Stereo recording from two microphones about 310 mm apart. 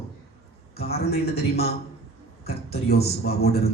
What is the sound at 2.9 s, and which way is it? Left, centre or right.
Speech, left.